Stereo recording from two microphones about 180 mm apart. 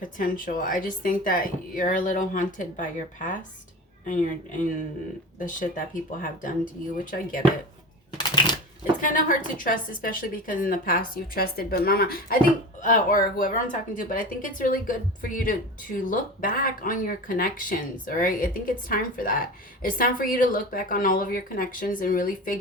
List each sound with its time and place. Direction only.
0.0 s speech: 50° left (ahead or behind)
8.2 s typewriter: 25° left (ahead or behind)
9.0 s speech: 50° left (ahead or behind)